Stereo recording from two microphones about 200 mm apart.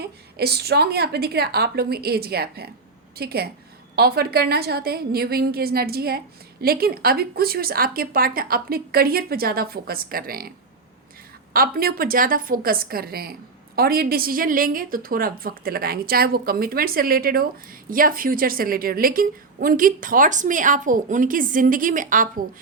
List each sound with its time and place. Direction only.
0.0 s a woman's voice: 50° right (ahead or behind)
11.5 s a woman's voice: 45° right (ahead or behind)